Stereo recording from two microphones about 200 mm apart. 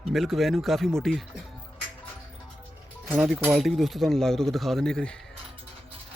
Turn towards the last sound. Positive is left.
turn(degrees=5)  # may be behind; listen again after turning